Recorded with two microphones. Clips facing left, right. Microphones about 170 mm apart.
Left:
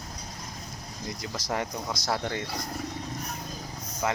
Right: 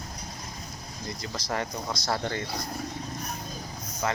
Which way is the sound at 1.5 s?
10° left (ahead or behind).